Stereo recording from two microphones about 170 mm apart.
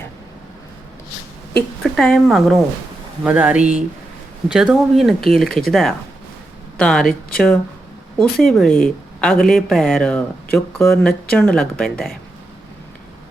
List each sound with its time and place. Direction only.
1.8 s speech: centre (ahead or behind)
6.7 s speech: 5° left (ahead or behind)